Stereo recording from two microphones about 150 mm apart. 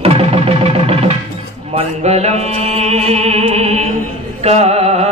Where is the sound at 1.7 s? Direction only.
45° right (ahead or behind).